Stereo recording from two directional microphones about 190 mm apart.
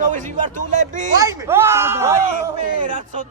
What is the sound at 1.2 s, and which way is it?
A man's voice, 20° right (ahead or behind).